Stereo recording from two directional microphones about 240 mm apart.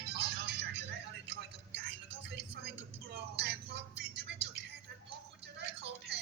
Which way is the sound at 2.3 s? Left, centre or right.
Right.